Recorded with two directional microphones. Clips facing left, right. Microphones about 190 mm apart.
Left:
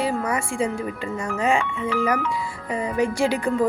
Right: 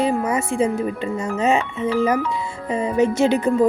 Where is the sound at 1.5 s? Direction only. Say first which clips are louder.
Right 3 dB; 25° right (ahead or behind).